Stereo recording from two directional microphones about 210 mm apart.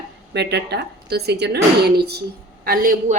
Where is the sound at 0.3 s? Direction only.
55° right (ahead or behind).